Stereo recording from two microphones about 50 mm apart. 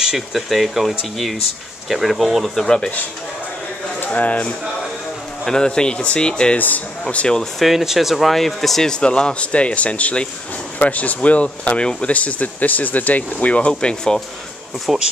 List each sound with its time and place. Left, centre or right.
0.0 s speech: centre
4.0 s speech: left
5.4 s speech: centre
6.6 s speech: left
7.3 s speech: centre
8.9 s speech: centre
13.7 s speech: centre
14.9 s speech: centre